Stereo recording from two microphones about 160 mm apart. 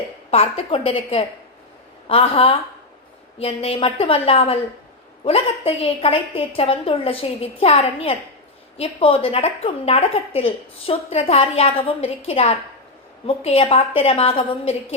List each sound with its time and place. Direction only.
0.3 s a woman's voice: 40° left (ahead or behind)